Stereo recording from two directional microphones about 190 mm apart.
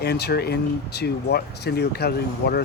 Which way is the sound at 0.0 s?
60° left (ahead or behind).